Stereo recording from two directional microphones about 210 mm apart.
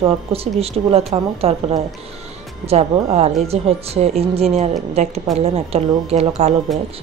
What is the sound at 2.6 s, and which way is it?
Speech, 30° right (ahead or behind).